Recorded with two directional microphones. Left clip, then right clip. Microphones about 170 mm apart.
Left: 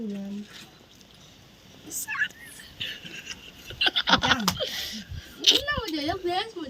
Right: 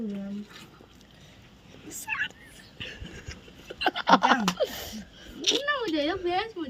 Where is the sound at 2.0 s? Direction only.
50° right (ahead or behind).